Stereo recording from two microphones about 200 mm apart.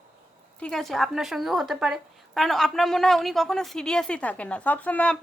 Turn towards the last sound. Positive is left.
turn(degrees=5)  # may be behind; listen again after turning